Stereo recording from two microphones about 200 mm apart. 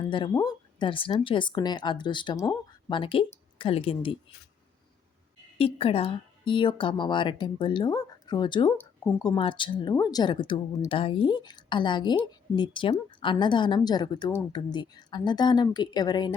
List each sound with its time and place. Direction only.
0.0 s speech: 20° left (ahead or behind)
5.5 s speech: 30° left (ahead or behind)